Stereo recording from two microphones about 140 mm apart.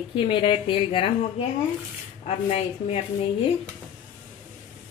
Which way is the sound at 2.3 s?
50° left (ahead or behind).